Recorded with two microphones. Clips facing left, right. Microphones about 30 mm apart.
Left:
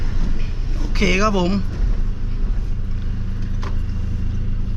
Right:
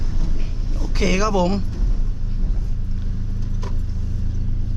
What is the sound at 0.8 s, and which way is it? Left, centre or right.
Speech, centre.